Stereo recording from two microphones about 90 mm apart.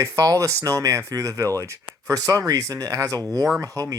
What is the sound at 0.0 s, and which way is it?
Speech, 35° right (ahead or behind).